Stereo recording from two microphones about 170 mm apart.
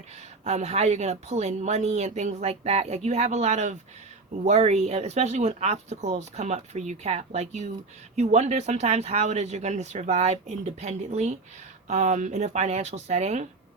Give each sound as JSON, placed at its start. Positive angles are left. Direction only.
{"t": 0.4, "sound": "speech", "side_deg": -40}